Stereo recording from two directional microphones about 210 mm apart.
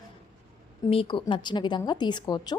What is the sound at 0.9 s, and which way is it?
A woman's voice, 25° left (ahead or behind).